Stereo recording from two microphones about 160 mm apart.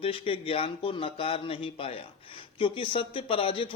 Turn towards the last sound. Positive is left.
turn(degrees=35)  # may be behind; listen again after turning